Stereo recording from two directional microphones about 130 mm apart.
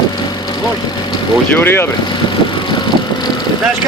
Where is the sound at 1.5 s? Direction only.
15° left (ahead or behind).